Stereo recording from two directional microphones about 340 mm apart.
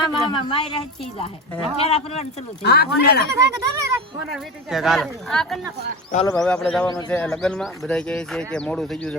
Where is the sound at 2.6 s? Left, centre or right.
Left.